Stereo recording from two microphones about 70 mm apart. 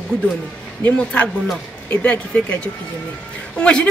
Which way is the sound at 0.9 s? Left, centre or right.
Centre.